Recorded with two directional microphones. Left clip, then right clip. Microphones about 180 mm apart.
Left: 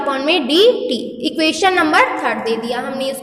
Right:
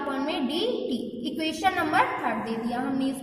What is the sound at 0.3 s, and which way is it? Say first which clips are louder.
A woman's voice: left 19 dB; 35° left (ahead or behind).